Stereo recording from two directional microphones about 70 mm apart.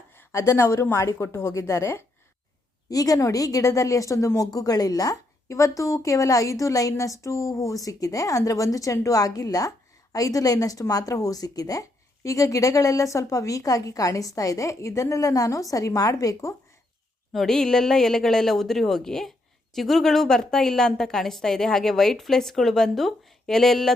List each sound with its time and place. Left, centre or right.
0.2 s a woman's voice: left
2.9 s a woman's voice: left
17.3 s a woman's voice: centre